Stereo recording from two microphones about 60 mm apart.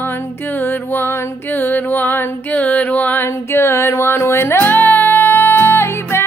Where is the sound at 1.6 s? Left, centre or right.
Left.